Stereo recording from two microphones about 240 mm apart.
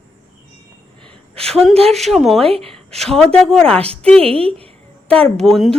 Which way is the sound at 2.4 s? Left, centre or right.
Right.